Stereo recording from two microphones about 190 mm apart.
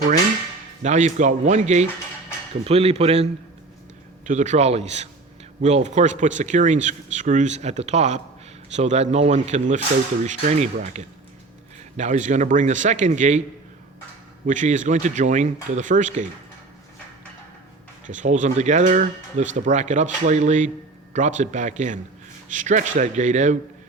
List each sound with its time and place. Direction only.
0.8 s speech: 40° right (ahead or behind)
4.3 s speech: 40° right (ahead or behind)
14.4 s speech: 40° right (ahead or behind)
18.0 s speech: 40° right (ahead or behind)